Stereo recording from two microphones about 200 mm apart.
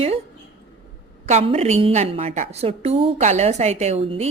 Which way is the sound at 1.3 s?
30° right (ahead or behind).